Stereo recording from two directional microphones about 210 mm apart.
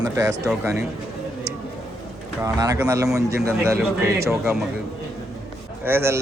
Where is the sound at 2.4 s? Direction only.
15° right (ahead or behind).